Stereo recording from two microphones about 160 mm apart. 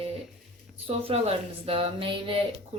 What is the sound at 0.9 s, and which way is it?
A woman's voice, 40° right (ahead or behind).